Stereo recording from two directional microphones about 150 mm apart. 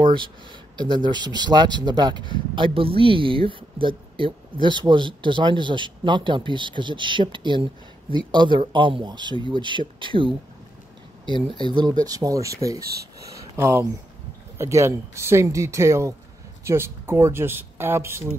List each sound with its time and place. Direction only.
0.0 s speech: 30° right (ahead or behind)
11.5 s speech: 30° right (ahead or behind)
13.2 s a sound: 20° right (ahead or behind)
14.6 s speech: 20° right (ahead or behind)